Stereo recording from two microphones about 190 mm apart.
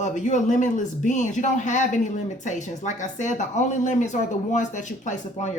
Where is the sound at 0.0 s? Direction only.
40° left (ahead or behind).